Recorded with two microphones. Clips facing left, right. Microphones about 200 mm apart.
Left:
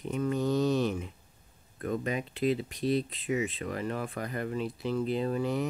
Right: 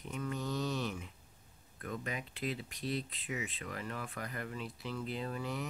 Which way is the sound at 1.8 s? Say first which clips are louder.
Left 9 dB; 30° left (ahead or behind).